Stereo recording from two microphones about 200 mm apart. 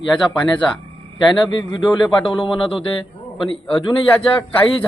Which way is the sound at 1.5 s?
20° left (ahead or behind).